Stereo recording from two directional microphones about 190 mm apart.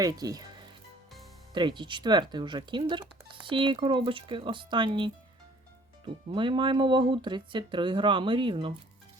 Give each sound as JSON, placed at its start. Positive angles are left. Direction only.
{"t": 0.0, "sound": "speech", "side_deg": -20}
{"t": 1.5, "sound": "speech", "side_deg": -25}
{"t": 6.3, "sound": "speech", "side_deg": -25}